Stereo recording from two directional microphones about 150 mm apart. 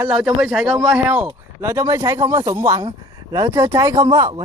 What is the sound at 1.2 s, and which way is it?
Speech, 20° right (ahead or behind).